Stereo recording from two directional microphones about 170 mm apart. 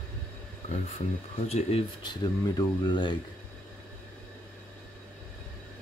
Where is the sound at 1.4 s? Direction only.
40° left (ahead or behind).